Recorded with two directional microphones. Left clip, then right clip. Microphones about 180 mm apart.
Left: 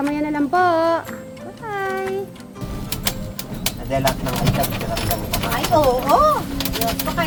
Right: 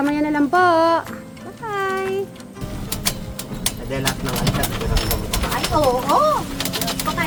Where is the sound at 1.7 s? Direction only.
5° right (ahead or behind).